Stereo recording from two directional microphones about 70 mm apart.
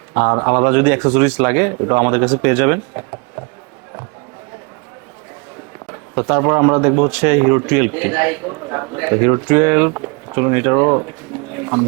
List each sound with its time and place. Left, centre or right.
0.4 s a man's voice: right
6.1 s a man's voice: right
11.5 s a sound: right